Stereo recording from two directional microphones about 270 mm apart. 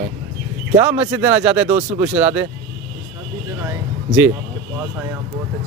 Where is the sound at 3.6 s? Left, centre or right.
Centre.